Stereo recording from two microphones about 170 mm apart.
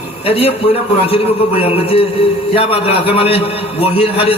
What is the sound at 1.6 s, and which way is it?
A man's voice, 35° left (ahead or behind).